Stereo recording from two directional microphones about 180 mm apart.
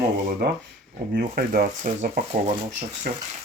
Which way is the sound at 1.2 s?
55° right (ahead or behind).